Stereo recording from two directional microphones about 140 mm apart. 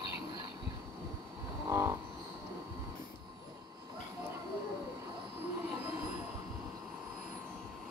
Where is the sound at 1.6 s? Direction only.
20° right (ahead or behind).